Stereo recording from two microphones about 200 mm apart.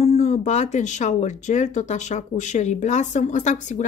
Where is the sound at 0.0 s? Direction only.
35° left (ahead or behind).